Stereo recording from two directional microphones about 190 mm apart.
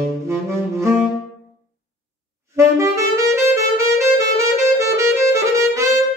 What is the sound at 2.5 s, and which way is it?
Saxophone, 15° right (ahead or behind).